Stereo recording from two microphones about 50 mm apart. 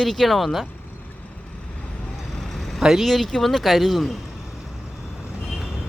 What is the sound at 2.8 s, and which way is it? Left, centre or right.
Speech, centre.